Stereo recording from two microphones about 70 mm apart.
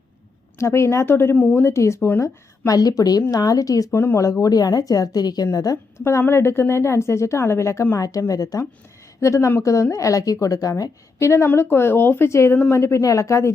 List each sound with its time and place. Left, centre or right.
0.6 s a woman's voice: left
2.2 s a woman's voice: left
3.9 s a woman's voice: left
4.2 s speech: left
6.1 s a woman's voice: left
7.9 s a woman's voice: left
11.4 s a woman's voice: left